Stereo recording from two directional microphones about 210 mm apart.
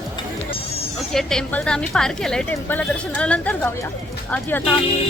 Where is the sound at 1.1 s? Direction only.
Centre (ahead or behind).